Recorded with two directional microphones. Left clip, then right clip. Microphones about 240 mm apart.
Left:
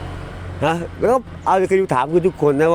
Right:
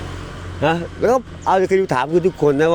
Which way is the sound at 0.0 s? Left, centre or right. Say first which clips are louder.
Right 1 dB; right.